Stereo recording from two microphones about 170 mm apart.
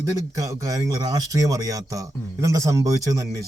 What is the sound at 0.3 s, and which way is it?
A man's voice, 20° right (ahead or behind).